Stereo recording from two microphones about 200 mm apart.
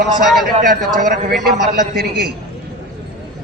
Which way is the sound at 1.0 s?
40° right (ahead or behind).